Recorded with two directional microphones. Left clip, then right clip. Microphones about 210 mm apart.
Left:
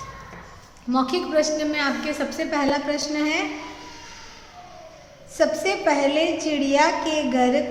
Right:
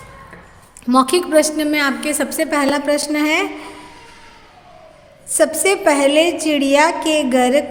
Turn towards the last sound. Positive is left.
turn(degrees=-50)  # may be behind; listen again after turning